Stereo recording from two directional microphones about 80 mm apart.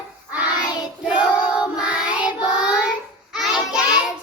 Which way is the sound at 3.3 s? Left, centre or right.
Centre.